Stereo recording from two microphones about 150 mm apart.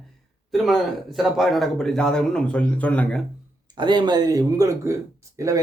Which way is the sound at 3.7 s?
30° right (ahead or behind).